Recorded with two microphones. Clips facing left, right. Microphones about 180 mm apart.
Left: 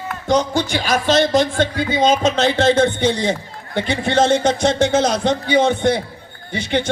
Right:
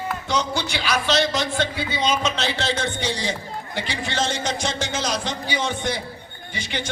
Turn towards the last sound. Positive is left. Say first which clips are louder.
# left 10 dB
turn(degrees=60)  # may be behind; listen again after turning